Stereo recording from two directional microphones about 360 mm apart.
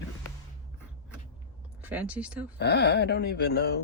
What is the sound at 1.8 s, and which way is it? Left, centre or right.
Speech, centre.